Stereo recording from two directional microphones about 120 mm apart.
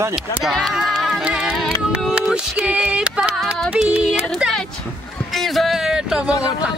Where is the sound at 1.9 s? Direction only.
5° right (ahead or behind).